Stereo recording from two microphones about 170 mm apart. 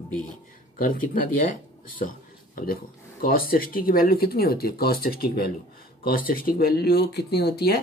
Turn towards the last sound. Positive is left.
turn(degrees=70)  # may be behind; listen again after turning